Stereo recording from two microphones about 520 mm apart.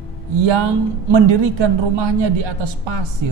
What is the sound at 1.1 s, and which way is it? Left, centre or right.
Speech, right.